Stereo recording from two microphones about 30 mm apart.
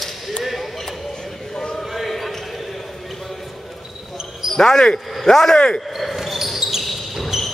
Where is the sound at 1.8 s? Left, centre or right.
Centre.